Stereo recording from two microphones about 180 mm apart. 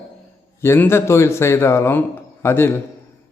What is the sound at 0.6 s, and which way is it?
A man's voice, 15° left (ahead or behind).